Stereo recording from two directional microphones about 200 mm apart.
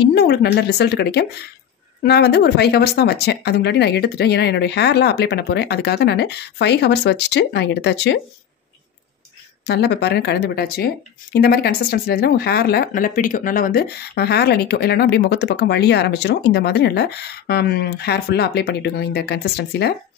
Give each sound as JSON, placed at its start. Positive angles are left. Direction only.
{"t": 0.0, "sound": "a woman's voice", "side_deg": 55}
{"t": 9.7, "sound": "a woman's voice", "side_deg": 55}